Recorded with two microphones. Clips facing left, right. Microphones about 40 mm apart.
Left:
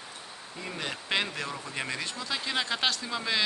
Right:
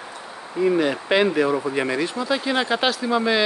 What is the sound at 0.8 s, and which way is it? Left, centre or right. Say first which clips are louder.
Speech: right 11 dB; centre.